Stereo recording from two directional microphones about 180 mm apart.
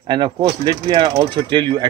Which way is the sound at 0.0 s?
25° right (ahead or behind).